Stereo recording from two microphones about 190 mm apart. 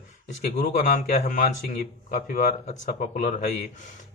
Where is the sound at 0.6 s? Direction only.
45° left (ahead or behind).